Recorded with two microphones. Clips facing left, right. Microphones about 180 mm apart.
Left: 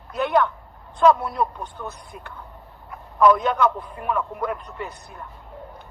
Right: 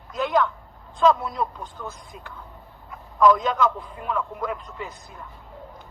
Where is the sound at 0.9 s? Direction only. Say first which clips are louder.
Left 2 dB; 60° left (ahead or behind).